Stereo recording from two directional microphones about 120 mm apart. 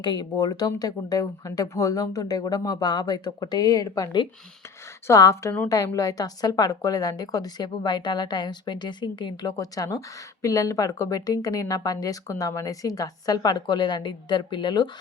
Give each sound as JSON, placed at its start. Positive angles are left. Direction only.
{"t": 0.0, "sound": "a woman's voice", "side_deg": 35}